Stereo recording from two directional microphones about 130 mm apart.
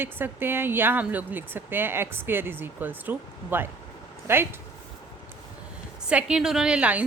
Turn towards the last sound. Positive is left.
turn(degrees=-10)  # may be behind; listen again after turning